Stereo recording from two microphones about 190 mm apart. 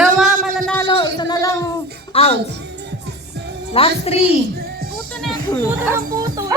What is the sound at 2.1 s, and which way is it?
Speech, 30° left (ahead or behind).